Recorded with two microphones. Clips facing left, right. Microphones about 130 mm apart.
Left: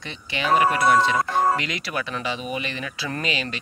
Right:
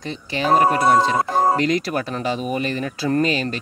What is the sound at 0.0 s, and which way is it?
Speech, 40° right (ahead or behind).